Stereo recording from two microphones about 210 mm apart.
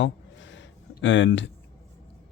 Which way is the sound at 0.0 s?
60° left (ahead or behind).